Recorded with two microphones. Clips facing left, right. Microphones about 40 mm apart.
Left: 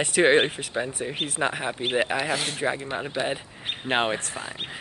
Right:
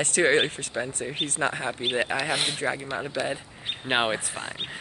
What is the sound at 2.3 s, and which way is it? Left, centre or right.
Speech, right.